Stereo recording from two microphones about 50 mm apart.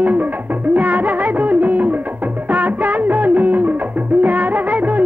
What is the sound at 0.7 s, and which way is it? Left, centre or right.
Music of bollywood, right.